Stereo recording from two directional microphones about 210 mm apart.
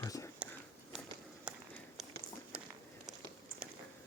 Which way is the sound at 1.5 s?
5° right (ahead or behind).